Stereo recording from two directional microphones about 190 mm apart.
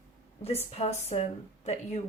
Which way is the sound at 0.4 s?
35° left (ahead or behind).